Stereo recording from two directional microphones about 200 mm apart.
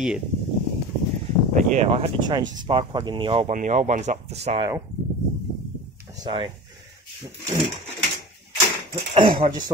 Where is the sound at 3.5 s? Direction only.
40° right (ahead or behind).